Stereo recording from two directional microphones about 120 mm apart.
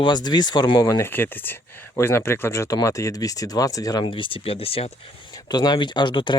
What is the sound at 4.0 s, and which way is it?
Speech, 45° left (ahead or behind).